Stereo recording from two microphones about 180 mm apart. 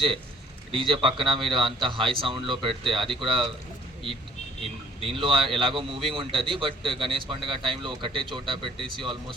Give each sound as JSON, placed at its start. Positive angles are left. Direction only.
{"t": 0.7, "sound": "a man's voice", "side_deg": -30}
{"t": 3.0, "sound": "speech", "side_deg": 0}
{"t": 3.2, "sound": "a man's voice", "side_deg": -25}
{"t": 5.1, "sound": "a man's voice", "side_deg": -30}